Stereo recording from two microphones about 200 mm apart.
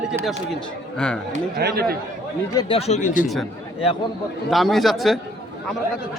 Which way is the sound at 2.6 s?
30° left (ahead or behind).